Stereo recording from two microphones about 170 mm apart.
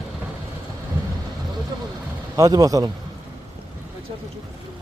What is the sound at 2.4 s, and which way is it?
Speech, 20° right (ahead or behind).